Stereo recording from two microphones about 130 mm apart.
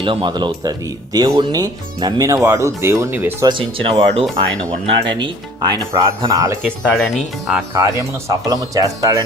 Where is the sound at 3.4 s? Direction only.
40° right (ahead or behind).